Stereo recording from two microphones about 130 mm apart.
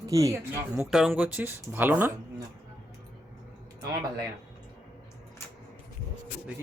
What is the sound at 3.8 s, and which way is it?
Speech, 30° right (ahead or behind).